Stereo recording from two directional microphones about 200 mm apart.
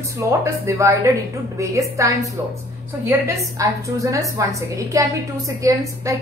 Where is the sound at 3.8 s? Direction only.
15° right (ahead or behind).